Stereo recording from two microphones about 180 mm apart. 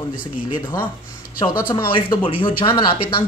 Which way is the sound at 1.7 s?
25° left (ahead or behind).